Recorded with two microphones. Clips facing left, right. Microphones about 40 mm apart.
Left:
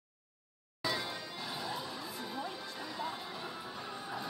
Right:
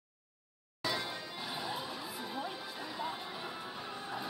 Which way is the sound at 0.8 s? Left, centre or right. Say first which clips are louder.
Even; centre.